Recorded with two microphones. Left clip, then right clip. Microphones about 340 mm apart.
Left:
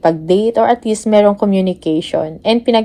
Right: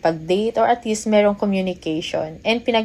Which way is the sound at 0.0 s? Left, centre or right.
Left.